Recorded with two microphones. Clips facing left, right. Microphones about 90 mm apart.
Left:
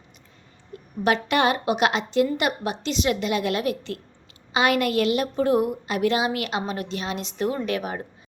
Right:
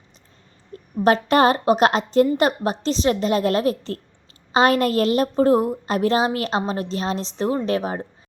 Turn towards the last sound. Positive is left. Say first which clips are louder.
# right 4 dB
turn(degrees=-30)  # may be behind; listen again after turning